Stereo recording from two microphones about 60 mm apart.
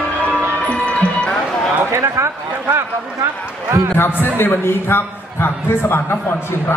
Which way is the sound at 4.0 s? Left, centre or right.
Left.